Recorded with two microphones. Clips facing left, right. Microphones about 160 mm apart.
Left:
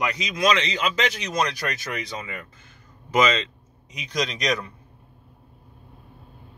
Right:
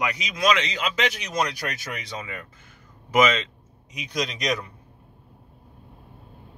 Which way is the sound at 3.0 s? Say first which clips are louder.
Right 1 dB; 10° right (ahead or behind).